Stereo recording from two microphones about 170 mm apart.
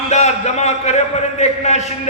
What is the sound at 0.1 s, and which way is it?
A man's voice, 40° left (ahead or behind).